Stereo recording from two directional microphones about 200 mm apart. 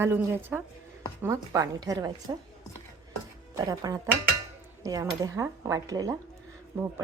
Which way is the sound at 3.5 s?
15° right (ahead or behind).